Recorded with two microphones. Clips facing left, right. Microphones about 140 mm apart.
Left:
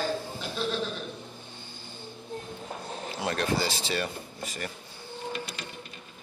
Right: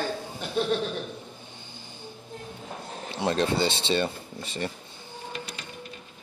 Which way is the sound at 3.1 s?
25° right (ahead or behind).